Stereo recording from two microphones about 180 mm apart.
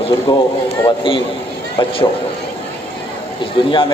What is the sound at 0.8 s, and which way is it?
Speech, 25° left (ahead or behind).